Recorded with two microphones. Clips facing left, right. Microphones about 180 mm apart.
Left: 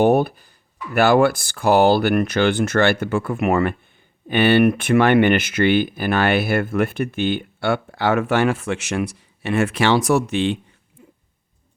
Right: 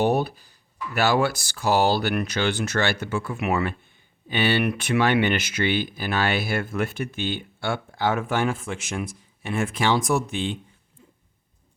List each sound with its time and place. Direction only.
0.0 s speech: 55° left (ahead or behind); by 10.6 s 75° left (ahead or behind)